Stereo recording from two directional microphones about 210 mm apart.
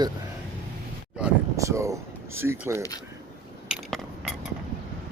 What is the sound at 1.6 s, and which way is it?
Speech, 15° right (ahead or behind).